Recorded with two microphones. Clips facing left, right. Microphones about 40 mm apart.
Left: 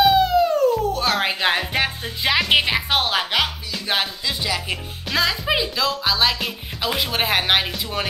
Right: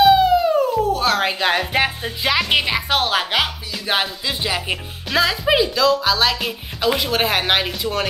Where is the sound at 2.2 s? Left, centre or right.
Centre.